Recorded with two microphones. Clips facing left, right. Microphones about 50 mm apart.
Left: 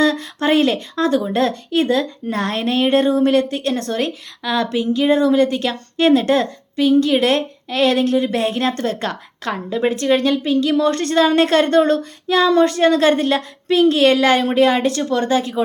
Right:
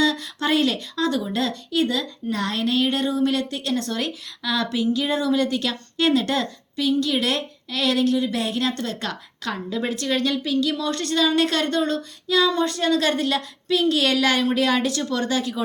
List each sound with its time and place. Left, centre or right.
0.0 s speech: left
12.5 s speech: left